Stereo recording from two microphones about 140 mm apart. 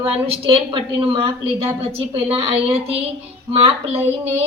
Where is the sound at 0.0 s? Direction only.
45° right (ahead or behind).